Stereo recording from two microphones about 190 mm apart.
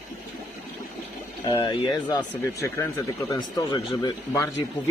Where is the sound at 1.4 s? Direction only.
15° left (ahead or behind).